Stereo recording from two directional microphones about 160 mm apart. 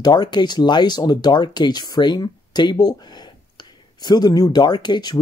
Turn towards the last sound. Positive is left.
turn(degrees=25)  # may be behind; listen again after turning